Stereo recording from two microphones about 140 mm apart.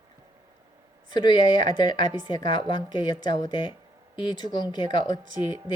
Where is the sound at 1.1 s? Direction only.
35° left (ahead or behind).